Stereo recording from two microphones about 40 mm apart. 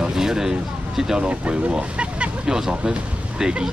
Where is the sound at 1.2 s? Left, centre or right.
Right.